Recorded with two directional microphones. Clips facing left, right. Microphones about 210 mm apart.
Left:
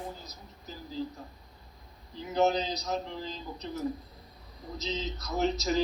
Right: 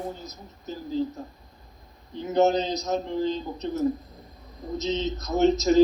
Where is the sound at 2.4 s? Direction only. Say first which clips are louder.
Right 5 dB; 45° right (ahead or behind).